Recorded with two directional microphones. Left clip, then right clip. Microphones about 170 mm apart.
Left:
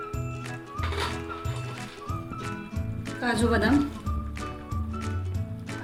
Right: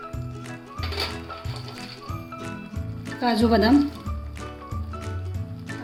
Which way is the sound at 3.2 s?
65° right (ahead or behind).